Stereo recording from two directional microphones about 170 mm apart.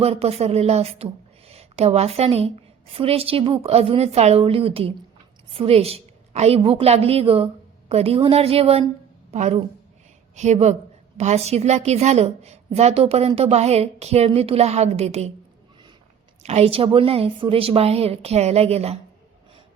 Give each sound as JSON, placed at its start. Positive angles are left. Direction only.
{"t": 0.0, "sound": "a woman's voice", "side_deg": -35}
{"t": 16.4, "sound": "a woman's voice", "side_deg": -40}